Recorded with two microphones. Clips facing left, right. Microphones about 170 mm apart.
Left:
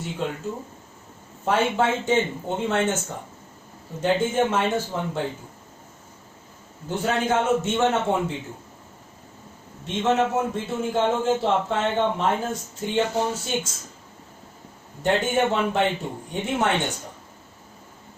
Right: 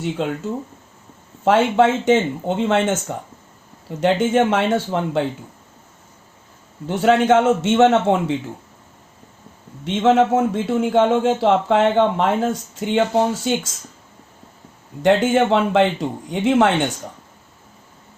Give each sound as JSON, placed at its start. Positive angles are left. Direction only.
{"t": 0.2, "sound": "a man's voice", "side_deg": -90}
{"t": 1.5, "sound": "a man's voice", "side_deg": -85}
{"t": 4.0, "sound": "a man's voice", "side_deg": -85}
{"t": 6.8, "sound": "a man's voice", "side_deg": -80}
{"t": 9.8, "sound": "a man's voice", "side_deg": -85}
{"t": 15.0, "sound": "a man's voice", "side_deg": -90}